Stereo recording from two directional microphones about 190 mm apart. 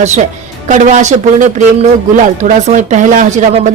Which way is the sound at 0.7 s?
40° right (ahead or behind).